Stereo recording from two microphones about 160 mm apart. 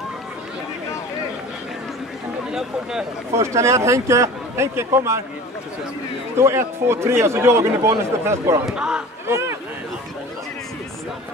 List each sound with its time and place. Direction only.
2.5 s speech: 5° right (ahead or behind)
3.3 s a man's voice: 20° right (ahead or behind)
6.3 s a man's voice: 15° right (ahead or behind)
8.6 s speech: 5° right (ahead or behind)
9.3 s speech: 15° right (ahead or behind)